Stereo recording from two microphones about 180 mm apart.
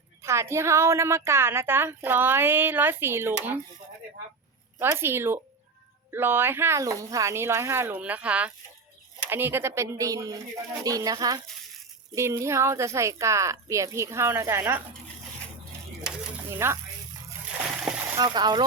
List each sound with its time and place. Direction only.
0.2 s a woman's voice: 15° right (ahead or behind)
4.8 s a woman's voice: 10° right (ahead or behind)
16.6 s a woman's voice: 15° right (ahead or behind)
17.6 s splash: 5° right (ahead or behind)
18.2 s speech: 25° right (ahead or behind)